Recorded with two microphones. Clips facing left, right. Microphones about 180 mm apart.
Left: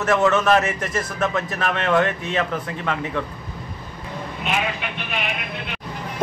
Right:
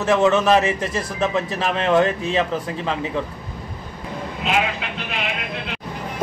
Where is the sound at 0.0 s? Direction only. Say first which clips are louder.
Right 2 dB; 15° right (ahead or behind).